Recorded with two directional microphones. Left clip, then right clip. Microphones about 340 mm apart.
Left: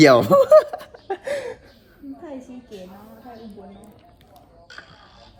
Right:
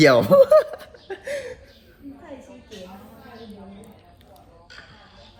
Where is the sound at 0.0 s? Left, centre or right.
Centre.